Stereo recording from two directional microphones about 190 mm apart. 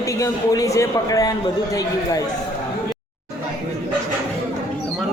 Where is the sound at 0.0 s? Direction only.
15° left (ahead or behind).